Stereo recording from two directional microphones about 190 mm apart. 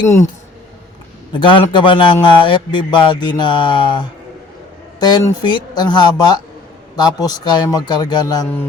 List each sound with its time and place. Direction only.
1.3 s a man's voice: 25° left (ahead or behind)